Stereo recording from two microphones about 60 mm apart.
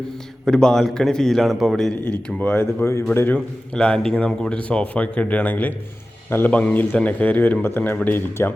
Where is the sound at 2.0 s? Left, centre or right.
Left.